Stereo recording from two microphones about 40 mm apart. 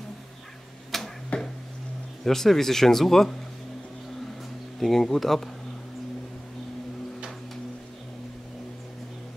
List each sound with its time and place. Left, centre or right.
0.9 s arrow: centre
1.3 s a sound: left
2.2 s speech: centre
4.7 s speech: centre